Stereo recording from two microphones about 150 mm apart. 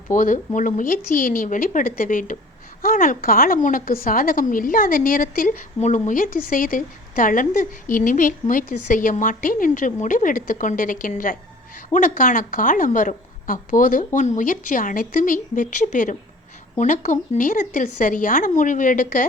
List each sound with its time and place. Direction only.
0.1 s a woman's voice: 60° left (ahead or behind)